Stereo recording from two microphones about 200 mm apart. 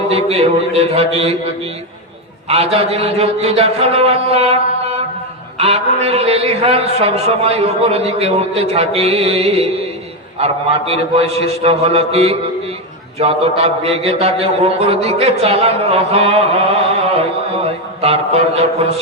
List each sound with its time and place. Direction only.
0.1 s a man's voice: 30° right (ahead or behind)
2.5 s a man's voice: 30° right (ahead or behind)